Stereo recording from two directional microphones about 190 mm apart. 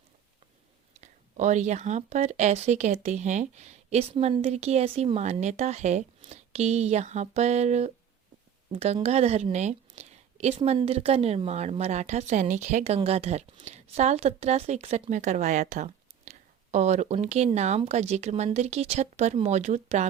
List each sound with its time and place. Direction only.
1.0 s a woman's voice: 40° right (ahead or behind)